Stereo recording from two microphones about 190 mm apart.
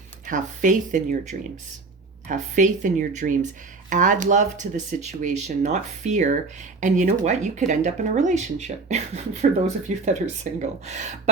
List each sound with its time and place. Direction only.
0.3 s speech: 40° right (ahead or behind)